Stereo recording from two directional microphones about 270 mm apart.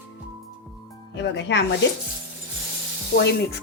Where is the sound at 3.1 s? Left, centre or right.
Left.